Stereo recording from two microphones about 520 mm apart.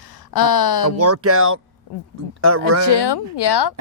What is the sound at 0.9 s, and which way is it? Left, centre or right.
Speech, right.